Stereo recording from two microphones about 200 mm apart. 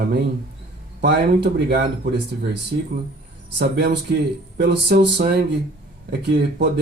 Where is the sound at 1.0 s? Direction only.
55° right (ahead or behind).